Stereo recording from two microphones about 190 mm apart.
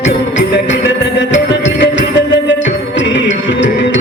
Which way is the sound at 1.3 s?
70° left (ahead or behind).